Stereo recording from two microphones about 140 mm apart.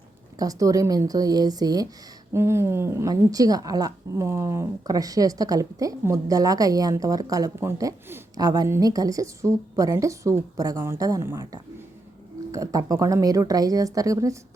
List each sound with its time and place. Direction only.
0.3 s a woman's voice: 25° right (ahead or behind)